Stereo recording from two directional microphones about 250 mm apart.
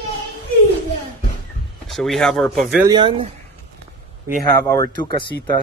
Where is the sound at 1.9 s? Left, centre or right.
Centre.